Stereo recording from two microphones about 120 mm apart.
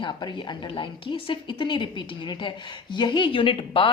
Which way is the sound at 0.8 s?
45° left (ahead or behind).